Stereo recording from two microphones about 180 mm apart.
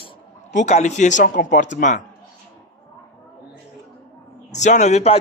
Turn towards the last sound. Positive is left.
turn(degrees=35)  # may be behind; listen again after turning